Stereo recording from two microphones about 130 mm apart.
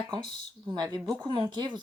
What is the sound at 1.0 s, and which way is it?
Speech, 10° right (ahead or behind).